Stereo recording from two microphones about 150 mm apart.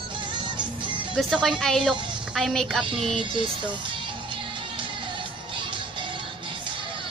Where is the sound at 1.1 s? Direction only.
Centre (ahead or behind).